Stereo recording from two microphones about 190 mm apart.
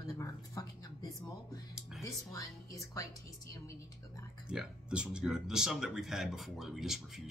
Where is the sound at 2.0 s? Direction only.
15° left (ahead or behind).